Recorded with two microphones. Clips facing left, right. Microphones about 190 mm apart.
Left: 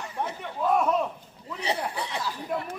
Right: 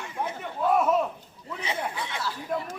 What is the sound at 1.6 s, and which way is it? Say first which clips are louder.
Speech: left 2 dB; 35° left (ahead or behind).